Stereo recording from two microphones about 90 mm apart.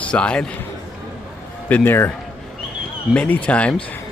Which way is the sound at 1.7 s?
20° left (ahead or behind).